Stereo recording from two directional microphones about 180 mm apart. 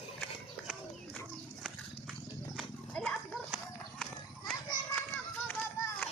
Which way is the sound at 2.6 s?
Centre (ahead or behind).